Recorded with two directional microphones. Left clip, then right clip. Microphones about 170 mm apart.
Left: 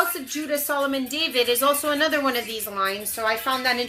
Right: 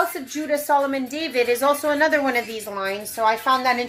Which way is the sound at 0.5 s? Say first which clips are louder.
Right 4 dB; 15° left (ahead or behind).